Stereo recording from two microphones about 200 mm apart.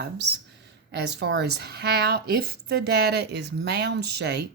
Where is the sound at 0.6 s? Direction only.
55° right (ahead or behind).